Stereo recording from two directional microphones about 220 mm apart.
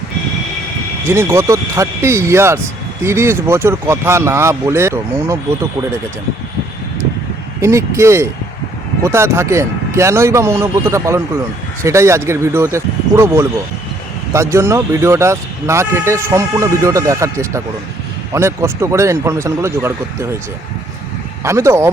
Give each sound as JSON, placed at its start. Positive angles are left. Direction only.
{"t": 1.0, "sound": "speech", "side_deg": -10}
{"t": 7.6, "sound": "speech", "side_deg": -15}
{"t": 21.4, "sound": "speech", "side_deg": -15}